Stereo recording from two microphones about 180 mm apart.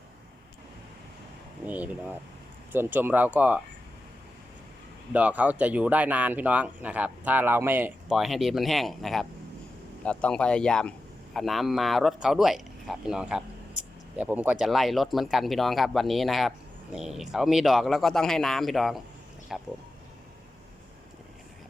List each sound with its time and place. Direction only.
1.6 s speech: 10° right (ahead or behind)
5.1 s speech: 5° right (ahead or behind)